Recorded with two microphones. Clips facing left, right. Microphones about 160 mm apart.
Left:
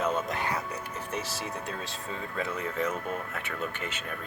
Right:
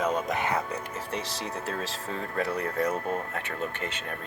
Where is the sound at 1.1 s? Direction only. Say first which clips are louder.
Right 1 dB; 30° right (ahead or behind).